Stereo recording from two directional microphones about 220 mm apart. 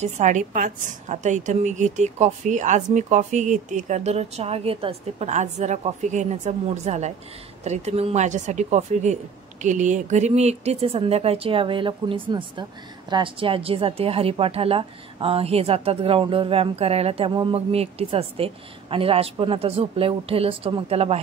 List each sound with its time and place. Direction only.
0.0 s a woman's voice: 35° right (ahead or behind)